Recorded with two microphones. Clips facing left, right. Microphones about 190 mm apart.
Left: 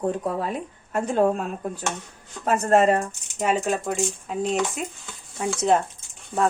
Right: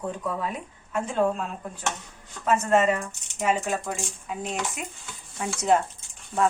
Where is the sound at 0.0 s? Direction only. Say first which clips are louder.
Left 5 dB; 35° left (ahead or behind).